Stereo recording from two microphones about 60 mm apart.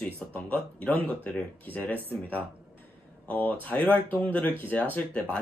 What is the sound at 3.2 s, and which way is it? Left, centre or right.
Speech, left.